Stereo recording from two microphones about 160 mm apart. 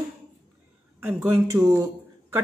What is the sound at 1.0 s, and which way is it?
Speech, 15° right (ahead or behind).